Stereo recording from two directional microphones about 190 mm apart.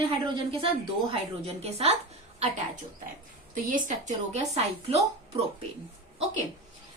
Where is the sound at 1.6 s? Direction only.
35° right (ahead or behind).